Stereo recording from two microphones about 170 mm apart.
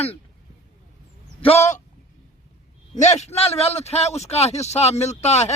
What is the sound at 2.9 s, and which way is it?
A man's voice, 40° left (ahead or behind).